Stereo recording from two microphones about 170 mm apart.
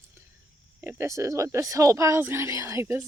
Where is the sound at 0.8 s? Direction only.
15° right (ahead or behind).